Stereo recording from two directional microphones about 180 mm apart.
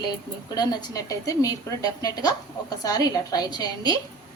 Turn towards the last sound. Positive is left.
turn(degrees=20)  # may be behind; listen again after turning